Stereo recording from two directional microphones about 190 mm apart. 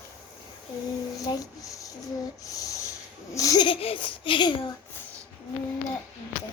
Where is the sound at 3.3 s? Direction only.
20° left (ahead or behind).